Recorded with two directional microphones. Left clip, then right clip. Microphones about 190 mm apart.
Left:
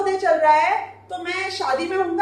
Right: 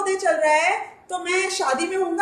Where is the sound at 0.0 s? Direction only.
60° right (ahead or behind).